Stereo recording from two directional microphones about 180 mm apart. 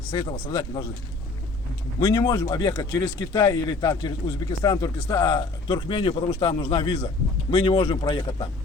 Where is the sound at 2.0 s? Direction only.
20° left (ahead or behind).